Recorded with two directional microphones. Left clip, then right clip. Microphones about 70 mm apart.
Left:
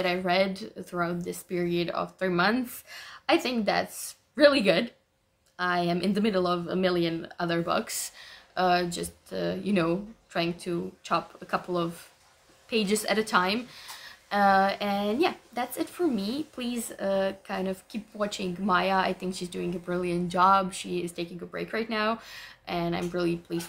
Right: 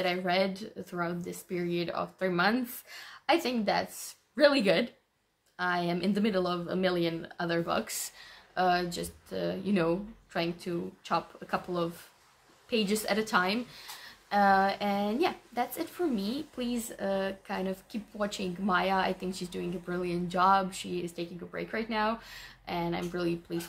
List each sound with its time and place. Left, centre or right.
0.0 s speech: left